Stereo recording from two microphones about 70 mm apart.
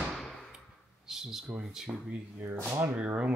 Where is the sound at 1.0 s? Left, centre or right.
Centre.